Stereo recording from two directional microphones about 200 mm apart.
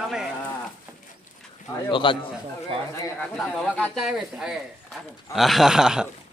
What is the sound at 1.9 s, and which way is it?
Speech, 25° left (ahead or behind).